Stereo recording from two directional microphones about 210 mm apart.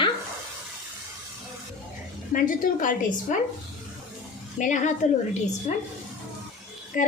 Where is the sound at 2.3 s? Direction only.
40° left (ahead or behind).